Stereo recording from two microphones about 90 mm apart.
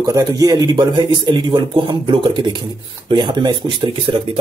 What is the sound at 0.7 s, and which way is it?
Speech, 65° right (ahead or behind).